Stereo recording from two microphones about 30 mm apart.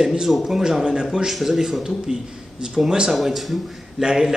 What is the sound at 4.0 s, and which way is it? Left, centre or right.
Speech, right.